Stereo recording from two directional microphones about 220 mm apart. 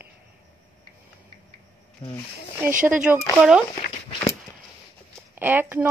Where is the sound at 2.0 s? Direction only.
20° left (ahead or behind).